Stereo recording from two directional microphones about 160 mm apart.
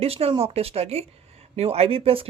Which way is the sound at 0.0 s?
40° right (ahead or behind).